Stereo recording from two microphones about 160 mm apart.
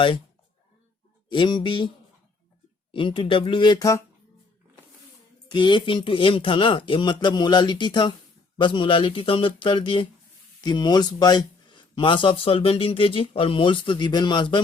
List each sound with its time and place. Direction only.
1.3 s speech: 30° left (ahead or behind)
2.9 s speech: 30° left (ahead or behind)
5.5 s speech: 30° left (ahead or behind)